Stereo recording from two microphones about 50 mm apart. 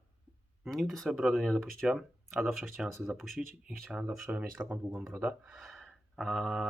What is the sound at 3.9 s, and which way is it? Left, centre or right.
Speech, centre.